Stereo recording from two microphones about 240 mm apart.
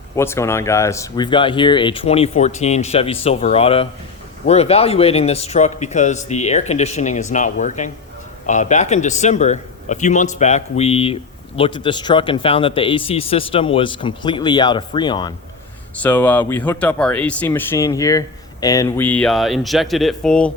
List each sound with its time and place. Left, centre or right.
0.2 s a man's voice: centre
16.0 s speech: centre